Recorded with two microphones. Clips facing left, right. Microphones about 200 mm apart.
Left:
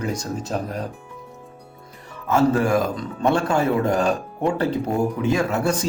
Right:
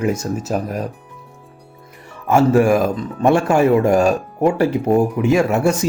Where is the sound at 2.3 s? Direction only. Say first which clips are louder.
Right 5 dB; 15° right (ahead or behind).